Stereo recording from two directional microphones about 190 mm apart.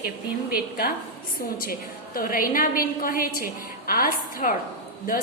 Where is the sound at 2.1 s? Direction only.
50° left (ahead or behind).